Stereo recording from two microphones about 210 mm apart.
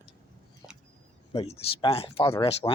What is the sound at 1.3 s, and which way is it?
Speech, 25° left (ahead or behind).